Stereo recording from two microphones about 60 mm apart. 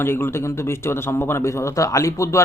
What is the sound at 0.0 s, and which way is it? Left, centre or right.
A man's voice, left.